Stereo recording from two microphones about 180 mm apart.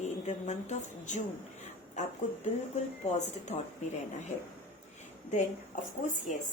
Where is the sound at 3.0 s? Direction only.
40° left (ahead or behind).